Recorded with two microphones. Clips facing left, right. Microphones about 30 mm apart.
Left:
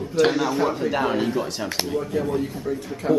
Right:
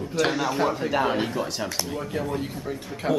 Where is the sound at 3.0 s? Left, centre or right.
Right.